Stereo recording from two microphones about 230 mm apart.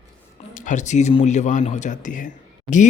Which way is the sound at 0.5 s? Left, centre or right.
Left.